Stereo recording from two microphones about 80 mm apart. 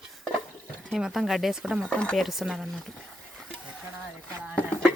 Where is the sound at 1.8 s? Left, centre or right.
Centre.